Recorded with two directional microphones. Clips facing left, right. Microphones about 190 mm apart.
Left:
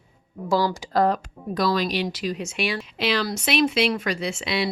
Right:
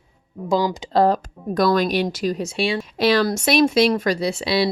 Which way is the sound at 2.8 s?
45° right (ahead or behind).